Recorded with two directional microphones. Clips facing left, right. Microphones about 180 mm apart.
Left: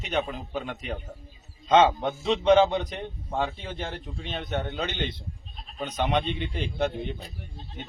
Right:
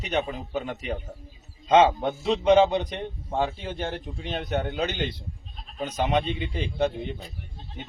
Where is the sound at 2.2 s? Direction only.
30° right (ahead or behind).